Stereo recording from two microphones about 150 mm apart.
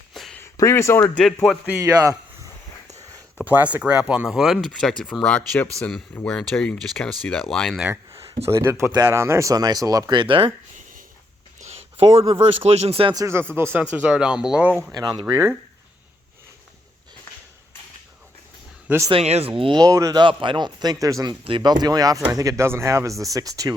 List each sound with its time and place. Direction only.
0.1 s a sound: centre (ahead or behind)
0.3 s speech: 20° left (ahead or behind)
1.2 s speech: 5° left (ahead or behind)
3.4 s speech: 10° right (ahead or behind)
8.4 s speech: 20° right (ahead or behind); by 10.5 s 35° right (ahead or behind)
11.6 s speech: 40° right (ahead or behind)
13.1 s speech: 20° right (ahead or behind)
14.9 s speech: 25° right (ahead or behind)
18.9 s speech: 20° right (ahead or behind)
19.1 s speech: 45° right (ahead or behind); by 23.7 s 25° right (ahead or behind)